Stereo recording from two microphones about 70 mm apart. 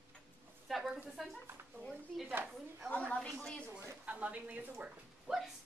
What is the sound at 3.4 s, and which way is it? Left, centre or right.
Speech, centre.